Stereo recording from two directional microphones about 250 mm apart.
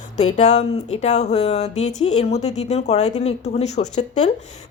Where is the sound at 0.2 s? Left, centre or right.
Left.